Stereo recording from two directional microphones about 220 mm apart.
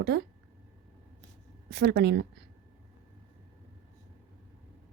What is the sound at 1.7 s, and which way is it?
Speech, 45° right (ahead or behind).